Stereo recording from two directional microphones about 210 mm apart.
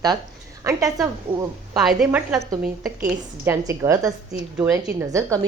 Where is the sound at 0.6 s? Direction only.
15° right (ahead or behind).